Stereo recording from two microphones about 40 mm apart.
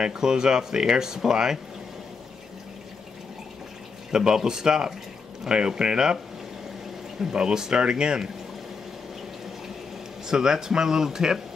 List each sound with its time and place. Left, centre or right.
0.0 s speech: centre
4.1 s speech: centre
7.2 s speech: centre
10.2 s speech: centre